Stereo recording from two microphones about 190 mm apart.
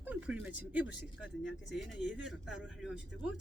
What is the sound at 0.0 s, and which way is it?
Speech, 10° right (ahead or behind).